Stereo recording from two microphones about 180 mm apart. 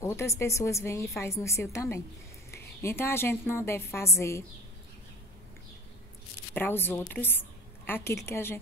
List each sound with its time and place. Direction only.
0.0 s a woman's voice: 15° left (ahead or behind)
6.5 s a woman's voice: 10° left (ahead or behind)